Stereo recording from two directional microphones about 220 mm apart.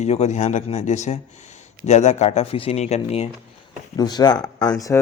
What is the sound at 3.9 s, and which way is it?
Speech, 20° left (ahead or behind).